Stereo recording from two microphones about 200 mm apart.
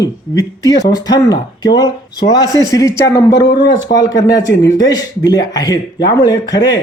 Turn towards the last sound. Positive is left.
turn(degrees=20)  # may be behind; listen again after turning